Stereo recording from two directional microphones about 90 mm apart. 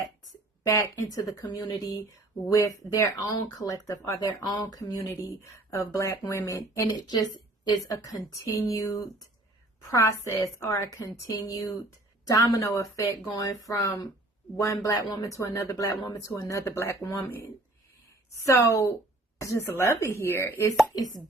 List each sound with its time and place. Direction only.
0.6 s speech: 40° left (ahead or behind)
4.4 s speech: 50° left (ahead or behind); by 20.7 s 35° left (ahead or behind)